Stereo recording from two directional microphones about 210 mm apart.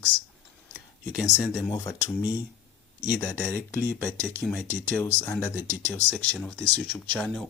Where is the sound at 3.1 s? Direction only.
10° left (ahead or behind).